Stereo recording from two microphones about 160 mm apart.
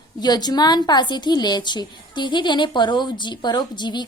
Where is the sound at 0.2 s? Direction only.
25° left (ahead or behind).